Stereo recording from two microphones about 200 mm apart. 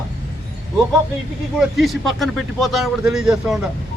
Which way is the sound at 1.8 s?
Centre (ahead or behind).